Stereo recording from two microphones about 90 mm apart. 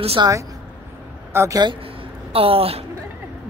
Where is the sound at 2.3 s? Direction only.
90° right.